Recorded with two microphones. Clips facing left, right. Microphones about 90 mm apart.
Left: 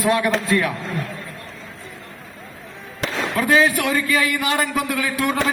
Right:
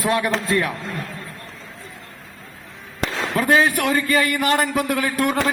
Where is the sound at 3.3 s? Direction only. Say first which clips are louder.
Even; 40° right (ahead or behind).